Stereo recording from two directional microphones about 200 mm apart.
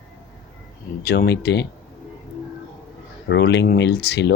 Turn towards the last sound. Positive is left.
turn(degrees=55)  # may be behind; listen again after turning